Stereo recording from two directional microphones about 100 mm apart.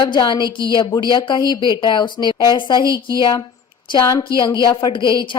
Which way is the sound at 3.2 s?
50° left (ahead or behind).